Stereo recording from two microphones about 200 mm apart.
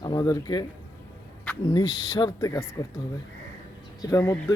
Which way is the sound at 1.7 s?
20° left (ahead or behind).